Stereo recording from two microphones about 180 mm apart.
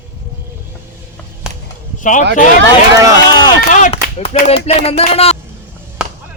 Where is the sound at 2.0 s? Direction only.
45° left (ahead or behind).